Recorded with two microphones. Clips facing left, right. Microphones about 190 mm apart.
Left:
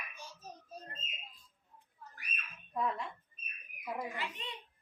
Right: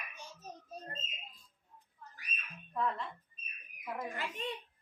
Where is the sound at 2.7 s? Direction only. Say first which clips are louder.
Even; 15° left (ahead or behind).